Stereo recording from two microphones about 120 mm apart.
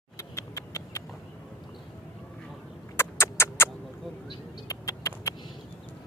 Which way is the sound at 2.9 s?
20° left (ahead or behind).